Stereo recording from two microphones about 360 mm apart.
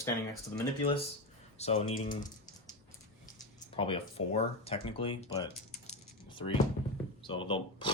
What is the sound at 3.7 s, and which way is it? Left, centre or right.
Speech, centre.